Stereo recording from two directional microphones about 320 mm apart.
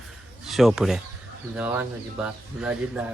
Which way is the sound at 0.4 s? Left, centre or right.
Centre.